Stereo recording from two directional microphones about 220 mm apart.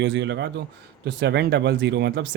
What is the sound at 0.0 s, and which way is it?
Speech, 55° right (ahead or behind).